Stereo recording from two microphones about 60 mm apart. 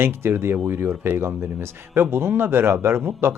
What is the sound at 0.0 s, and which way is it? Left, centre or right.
Speech, right.